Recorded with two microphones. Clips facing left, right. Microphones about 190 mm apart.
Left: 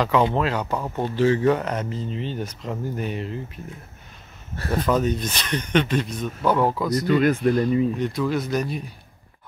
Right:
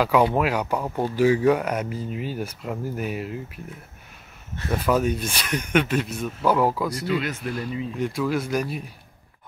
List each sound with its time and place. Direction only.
0.0 s speech: 10° right (ahead or behind)
4.6 s speech: 10° right (ahead or behind)
7.1 s speech: 45° left (ahead or behind)
8.0 s speech: 5° right (ahead or behind)